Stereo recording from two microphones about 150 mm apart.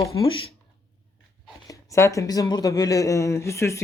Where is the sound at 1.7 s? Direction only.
20° left (ahead or behind).